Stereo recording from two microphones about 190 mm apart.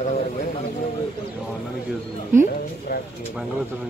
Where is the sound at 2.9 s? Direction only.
50° left (ahead or behind).